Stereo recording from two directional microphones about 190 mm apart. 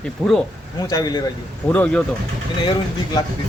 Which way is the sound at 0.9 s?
20° left (ahead or behind).